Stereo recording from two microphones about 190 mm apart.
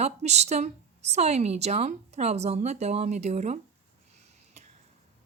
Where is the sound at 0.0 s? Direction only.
35° right (ahead or behind).